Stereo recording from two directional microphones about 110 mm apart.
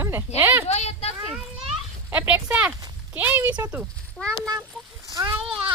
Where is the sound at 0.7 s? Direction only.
75° left (ahead or behind).